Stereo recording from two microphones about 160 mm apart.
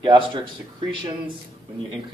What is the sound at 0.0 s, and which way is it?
Speech, 30° right (ahead or behind).